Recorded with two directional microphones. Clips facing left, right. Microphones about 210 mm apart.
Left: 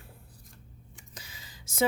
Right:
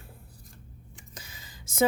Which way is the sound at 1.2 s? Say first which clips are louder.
Right 1 dB; 50° right (ahead or behind).